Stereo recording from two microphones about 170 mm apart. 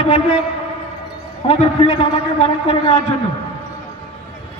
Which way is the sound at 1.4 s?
30° left (ahead or behind).